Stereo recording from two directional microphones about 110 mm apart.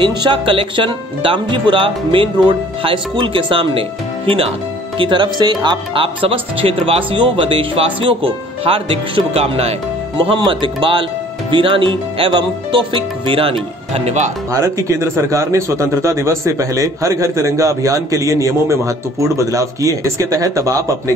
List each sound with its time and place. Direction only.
0.0 s speech: 45° right (ahead or behind); by 9.8 s 70° right (ahead or behind)
10.1 s speech: 45° right (ahead or behind); by 14.3 s 85° right
14.5 s a man's voice: 30° right (ahead or behind)